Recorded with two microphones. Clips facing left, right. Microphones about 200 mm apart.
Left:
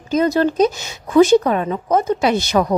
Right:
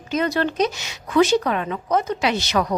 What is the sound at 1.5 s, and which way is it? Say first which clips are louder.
Speech: left 4 dB; 35° left (ahead or behind).